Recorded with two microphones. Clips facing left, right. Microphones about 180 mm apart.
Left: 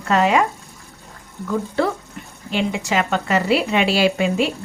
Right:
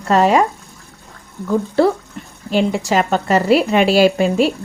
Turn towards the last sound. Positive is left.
turn(degrees=-40)  # may be behind; listen again after turning